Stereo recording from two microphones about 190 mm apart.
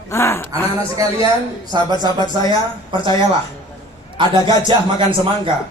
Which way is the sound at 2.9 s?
25° right (ahead or behind).